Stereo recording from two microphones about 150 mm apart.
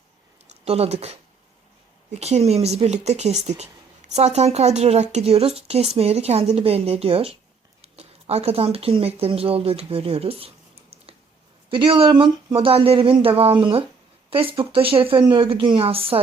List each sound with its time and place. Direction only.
0.4 s speech: 45° right (ahead or behind)
2.1 s speech: 45° right (ahead or behind)
11.7 s speech: 35° right (ahead or behind)